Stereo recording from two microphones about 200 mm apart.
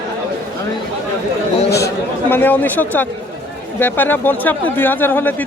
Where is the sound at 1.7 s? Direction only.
15° left (ahead or behind).